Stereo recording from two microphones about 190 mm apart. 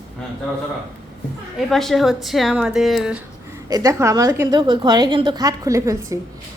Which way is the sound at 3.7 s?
20° right (ahead or behind).